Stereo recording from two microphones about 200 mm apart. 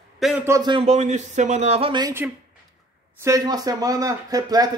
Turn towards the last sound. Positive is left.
turn(degrees=-20)  # may be behind; listen again after turning